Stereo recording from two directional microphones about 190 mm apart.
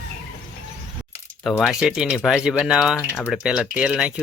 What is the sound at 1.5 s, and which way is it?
Speech, centre (ahead or behind).